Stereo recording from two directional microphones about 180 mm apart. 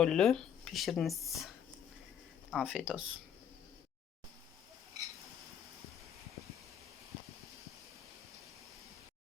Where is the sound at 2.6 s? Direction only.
5° right (ahead or behind).